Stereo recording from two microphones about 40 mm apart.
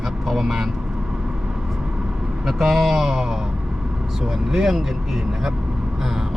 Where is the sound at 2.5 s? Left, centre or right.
Centre.